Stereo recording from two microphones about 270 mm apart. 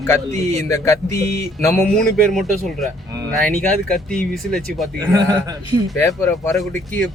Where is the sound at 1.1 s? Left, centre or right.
Right.